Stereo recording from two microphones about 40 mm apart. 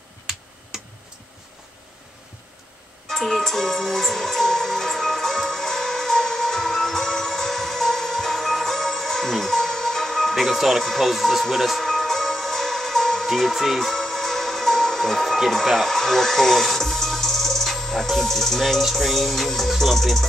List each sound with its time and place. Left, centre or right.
0.7 s tick-tock: centre
3.1 s music: centre
11.4 s speech: centre
11.8 s music: centre
15.9 s speech: centre